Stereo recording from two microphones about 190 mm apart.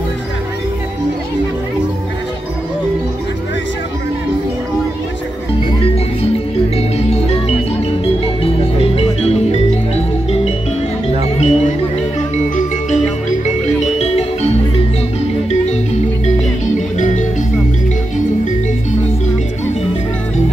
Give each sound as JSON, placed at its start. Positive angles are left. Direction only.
{"t": 8.0, "sound": "music", "side_deg": 30}
{"t": 11.3, "sound": "music", "side_deg": 35}
{"t": 13.9, "sound": "music", "side_deg": 35}
{"t": 17.0, "sound": "music", "side_deg": 40}